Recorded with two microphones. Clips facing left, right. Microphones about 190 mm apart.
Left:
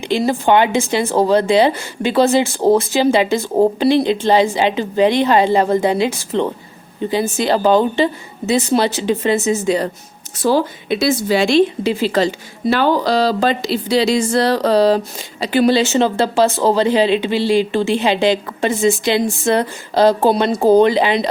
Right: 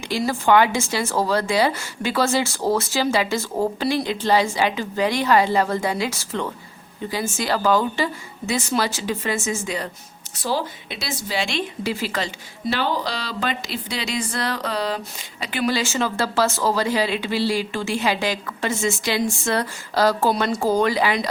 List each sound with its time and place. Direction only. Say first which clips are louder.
0.1 s a woman's voice: left 4 dB; 25° left (ahead or behind)
9.6 s speech: left 10 dB; 35° left (ahead or behind)
10.8 s a woman's voice: left 15 dB; 50° left (ahead or behind)
11.5 s a woman's voice: left 12 dB; 25° left (ahead or behind)
12.7 s a woman's voice: left 10 dB; 45° left (ahead or behind); by 21.2 s 25° left (ahead or behind)